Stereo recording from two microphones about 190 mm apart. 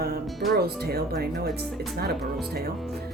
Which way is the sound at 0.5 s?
55° right (ahead or behind).